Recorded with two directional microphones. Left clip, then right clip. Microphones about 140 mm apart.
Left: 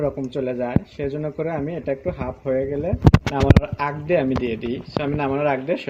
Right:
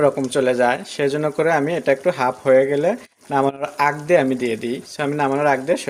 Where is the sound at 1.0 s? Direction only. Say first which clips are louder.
Right 7 dB; 30° right (ahead or behind).